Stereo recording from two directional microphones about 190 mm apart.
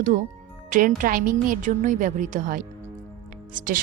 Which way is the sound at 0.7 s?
45° right (ahead or behind).